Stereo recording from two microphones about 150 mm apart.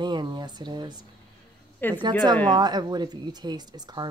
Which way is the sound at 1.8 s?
15° left (ahead or behind).